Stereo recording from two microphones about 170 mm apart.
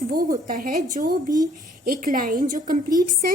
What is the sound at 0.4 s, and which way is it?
Speech, 50° right (ahead or behind).